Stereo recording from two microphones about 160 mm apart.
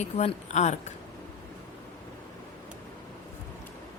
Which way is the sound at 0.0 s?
45° left (ahead or behind).